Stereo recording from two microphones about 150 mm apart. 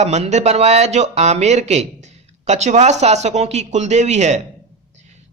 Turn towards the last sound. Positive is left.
turn(degrees=-50)  # may be behind; listen again after turning